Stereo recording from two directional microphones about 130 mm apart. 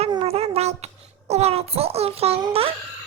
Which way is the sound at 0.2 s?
50° right (ahead or behind).